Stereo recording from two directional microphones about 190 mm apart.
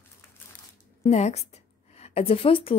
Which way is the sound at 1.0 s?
35° left (ahead or behind).